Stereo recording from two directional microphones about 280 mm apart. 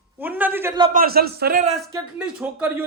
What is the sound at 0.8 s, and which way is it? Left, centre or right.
Speech, right.